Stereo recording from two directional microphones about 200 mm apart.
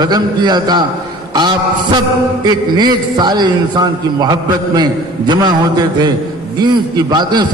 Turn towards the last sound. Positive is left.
turn(degrees=-20)  # may be behind; listen again after turning